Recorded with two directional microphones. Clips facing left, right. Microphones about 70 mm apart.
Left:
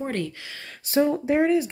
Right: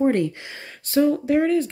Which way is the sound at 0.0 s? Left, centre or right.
Centre.